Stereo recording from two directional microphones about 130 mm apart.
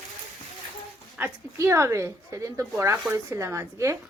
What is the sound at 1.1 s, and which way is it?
A woman's voice, 15° right (ahead or behind).